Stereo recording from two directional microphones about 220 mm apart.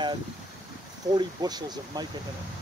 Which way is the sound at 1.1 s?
20° right (ahead or behind).